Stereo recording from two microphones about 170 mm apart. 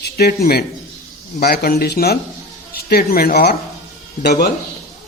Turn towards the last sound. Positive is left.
turn(degrees=70)  # may be behind; listen again after turning